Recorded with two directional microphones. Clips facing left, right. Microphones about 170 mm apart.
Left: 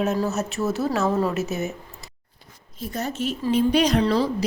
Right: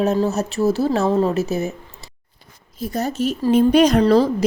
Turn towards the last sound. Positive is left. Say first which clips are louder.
# right 6 dB
turn(degrees=-45)  # may be behind; listen again after turning